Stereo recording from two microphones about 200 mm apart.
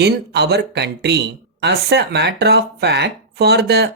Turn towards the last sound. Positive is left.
turn(degrees=-55)  # may be behind; listen again after turning